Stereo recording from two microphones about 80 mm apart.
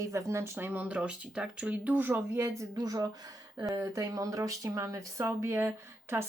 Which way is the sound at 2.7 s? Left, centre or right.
Right.